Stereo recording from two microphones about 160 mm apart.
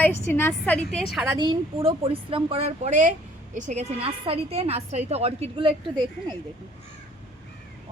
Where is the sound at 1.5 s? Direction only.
35° right (ahead or behind).